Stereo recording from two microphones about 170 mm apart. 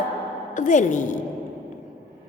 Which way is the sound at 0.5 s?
50° left (ahead or behind).